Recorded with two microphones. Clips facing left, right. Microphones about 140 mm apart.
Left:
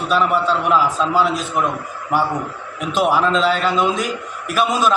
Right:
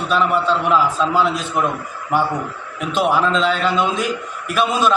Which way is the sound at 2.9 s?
5° left (ahead or behind).